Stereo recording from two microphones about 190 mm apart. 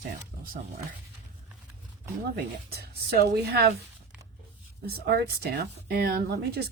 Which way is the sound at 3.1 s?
60° right (ahead or behind).